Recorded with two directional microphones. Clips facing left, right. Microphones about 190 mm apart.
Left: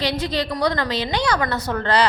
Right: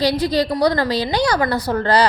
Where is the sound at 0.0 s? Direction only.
35° right (ahead or behind).